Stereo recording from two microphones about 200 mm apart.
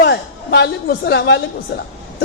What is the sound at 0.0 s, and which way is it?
A woman's voice, 60° left (ahead or behind).